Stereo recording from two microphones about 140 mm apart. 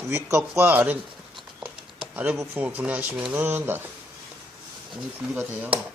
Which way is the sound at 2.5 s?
10° right (ahead or behind).